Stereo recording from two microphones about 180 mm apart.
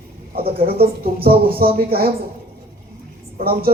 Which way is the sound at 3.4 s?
55° right (ahead or behind).